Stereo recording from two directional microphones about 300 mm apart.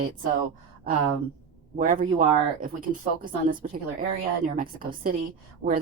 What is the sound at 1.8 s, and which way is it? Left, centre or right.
Speech, right.